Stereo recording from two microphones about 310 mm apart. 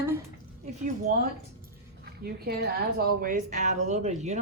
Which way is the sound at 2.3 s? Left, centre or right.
Right.